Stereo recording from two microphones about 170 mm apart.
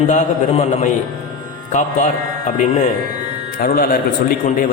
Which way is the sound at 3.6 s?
60° left (ahead or behind).